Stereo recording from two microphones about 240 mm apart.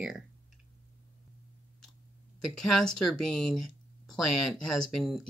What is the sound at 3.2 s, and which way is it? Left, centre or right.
Speech, centre.